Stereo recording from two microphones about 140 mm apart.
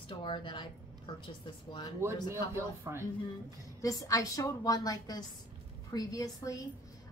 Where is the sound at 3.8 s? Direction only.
25° left (ahead or behind).